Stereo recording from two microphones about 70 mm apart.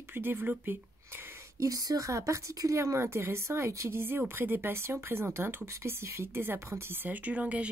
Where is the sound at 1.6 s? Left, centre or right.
Right.